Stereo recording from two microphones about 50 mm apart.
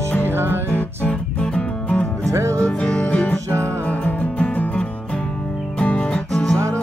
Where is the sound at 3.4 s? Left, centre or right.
Right.